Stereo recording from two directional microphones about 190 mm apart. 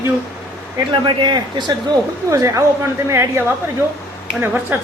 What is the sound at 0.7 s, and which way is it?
Speech, 25° right (ahead or behind).